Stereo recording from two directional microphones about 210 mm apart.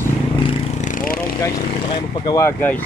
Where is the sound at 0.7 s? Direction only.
40° left (ahead or behind).